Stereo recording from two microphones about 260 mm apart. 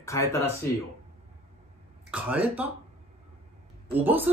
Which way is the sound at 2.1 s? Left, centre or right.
Centre.